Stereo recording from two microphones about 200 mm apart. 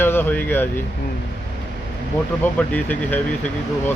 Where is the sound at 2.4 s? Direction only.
10° left (ahead or behind).